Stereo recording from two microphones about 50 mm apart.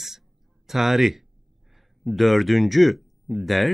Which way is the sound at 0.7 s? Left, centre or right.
Centre.